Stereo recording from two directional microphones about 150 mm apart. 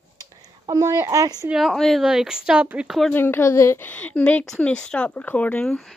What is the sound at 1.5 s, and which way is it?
A woman's voice, centre (ahead or behind).